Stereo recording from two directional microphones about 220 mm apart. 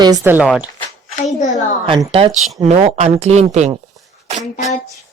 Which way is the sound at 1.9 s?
25° right (ahead or behind).